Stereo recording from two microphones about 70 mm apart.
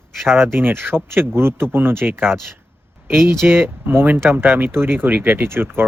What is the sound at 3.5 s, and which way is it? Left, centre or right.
Speech, right.